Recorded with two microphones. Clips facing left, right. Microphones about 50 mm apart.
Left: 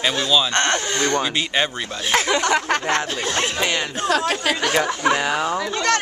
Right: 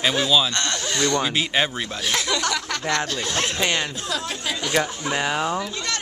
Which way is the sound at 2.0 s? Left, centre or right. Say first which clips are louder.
Left 6 dB; left.